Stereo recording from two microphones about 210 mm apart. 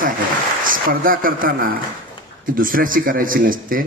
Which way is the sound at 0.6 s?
40° right (ahead or behind).